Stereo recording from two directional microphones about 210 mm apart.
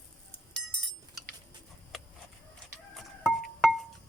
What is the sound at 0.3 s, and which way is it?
Chink, 5° left (ahead or behind).